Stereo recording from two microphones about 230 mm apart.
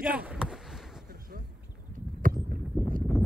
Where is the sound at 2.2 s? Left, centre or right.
Right.